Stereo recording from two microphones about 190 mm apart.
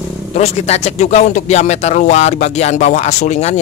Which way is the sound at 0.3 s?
35° left (ahead or behind).